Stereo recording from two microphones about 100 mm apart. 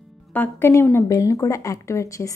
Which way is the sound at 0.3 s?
15° left (ahead or behind).